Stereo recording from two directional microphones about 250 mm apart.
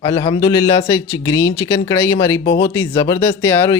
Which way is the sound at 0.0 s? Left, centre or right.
Centre.